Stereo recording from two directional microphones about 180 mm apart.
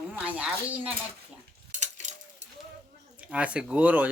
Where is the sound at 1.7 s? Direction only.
40° right (ahead or behind).